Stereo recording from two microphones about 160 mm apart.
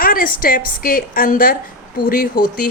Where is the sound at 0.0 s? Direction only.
65° left (ahead or behind).